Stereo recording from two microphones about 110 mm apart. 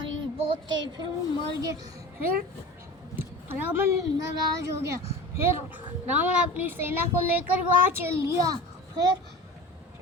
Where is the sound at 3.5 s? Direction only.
20° right (ahead or behind).